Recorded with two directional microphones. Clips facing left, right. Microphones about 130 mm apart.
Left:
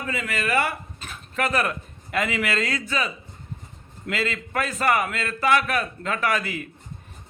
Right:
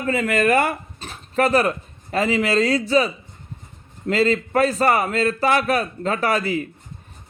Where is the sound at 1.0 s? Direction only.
35° right (ahead or behind).